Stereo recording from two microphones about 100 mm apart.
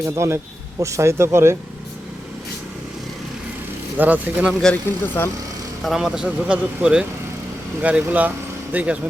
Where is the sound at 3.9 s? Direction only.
15° right (ahead or behind).